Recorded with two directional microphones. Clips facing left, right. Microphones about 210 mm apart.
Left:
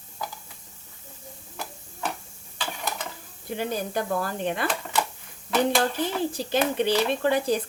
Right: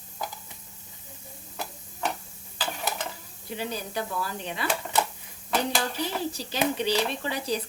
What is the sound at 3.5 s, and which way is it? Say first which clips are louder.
Speech: left 4 dB; 50° left (ahead or behind).